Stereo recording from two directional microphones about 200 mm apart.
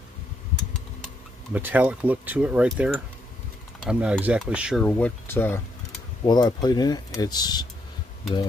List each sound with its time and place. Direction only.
1.5 s speech: 10° right (ahead or behind)
4.8 s speech: 10° left (ahead or behind)
6.2 s speech: 20° left (ahead or behind)